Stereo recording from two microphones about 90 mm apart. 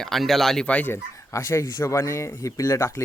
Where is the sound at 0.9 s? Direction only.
30° left (ahead or behind).